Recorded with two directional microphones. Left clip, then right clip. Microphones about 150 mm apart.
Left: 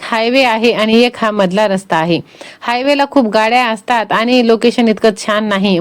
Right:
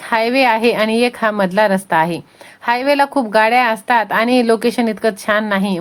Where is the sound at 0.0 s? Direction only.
35° left (ahead or behind).